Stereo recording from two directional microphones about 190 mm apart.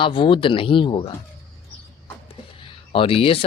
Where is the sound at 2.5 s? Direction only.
25° left (ahead or behind).